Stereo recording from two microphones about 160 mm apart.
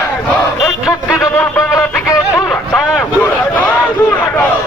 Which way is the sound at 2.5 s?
Centre (ahead or behind).